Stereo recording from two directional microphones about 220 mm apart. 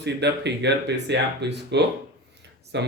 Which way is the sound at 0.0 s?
50° right (ahead or behind).